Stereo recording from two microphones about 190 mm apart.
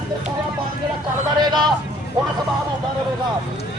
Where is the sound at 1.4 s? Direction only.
25° right (ahead or behind).